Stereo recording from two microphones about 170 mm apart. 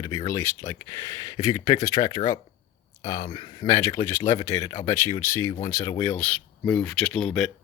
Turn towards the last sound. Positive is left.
turn(degrees=5)  # may be behind; listen again after turning